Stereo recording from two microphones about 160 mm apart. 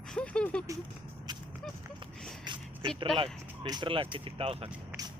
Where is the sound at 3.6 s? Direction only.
30° right (ahead or behind).